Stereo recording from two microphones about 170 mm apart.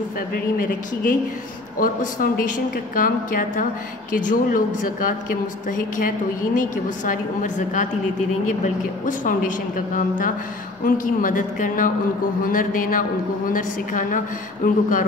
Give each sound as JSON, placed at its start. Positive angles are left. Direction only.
{"t": 0.3, "sound": "a woman's voice", "side_deg": 55}